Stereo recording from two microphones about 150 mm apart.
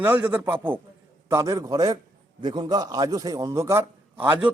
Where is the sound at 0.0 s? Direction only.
10° right (ahead or behind).